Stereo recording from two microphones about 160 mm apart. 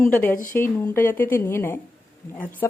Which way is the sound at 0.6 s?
15° left (ahead or behind).